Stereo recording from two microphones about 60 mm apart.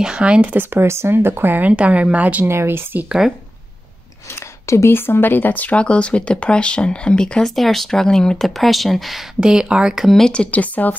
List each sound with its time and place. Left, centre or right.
0.0 s speech: centre
0.7 s speech: right
1.7 s speech: right
2.4 s speech: right
4.4 s speech: left; by 7.5 s centre
7.5 s speech: centre
9.4 s speech: centre
10.0 s speech: centre
10.3 s speech: left